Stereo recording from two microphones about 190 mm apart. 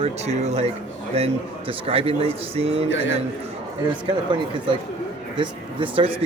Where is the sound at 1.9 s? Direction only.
30° right (ahead or behind).